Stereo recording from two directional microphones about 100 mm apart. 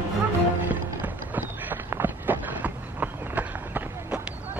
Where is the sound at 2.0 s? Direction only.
20° right (ahead or behind).